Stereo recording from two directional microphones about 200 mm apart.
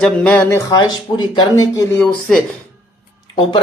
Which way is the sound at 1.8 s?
10° left (ahead or behind).